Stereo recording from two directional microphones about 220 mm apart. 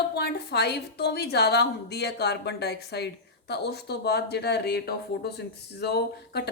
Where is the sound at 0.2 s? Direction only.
50° left (ahead or behind).